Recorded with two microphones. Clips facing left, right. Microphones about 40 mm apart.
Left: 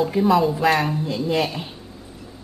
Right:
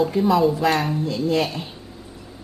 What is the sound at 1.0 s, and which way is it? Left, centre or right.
Speech, centre.